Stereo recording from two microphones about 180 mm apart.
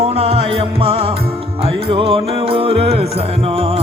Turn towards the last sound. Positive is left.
turn(degrees=-30)  # may be behind; listen again after turning